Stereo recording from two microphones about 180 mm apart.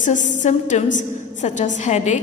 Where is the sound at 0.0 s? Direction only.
45° left (ahead or behind).